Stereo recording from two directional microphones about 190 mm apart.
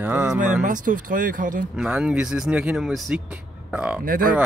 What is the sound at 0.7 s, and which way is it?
Speech, 45° right (ahead or behind).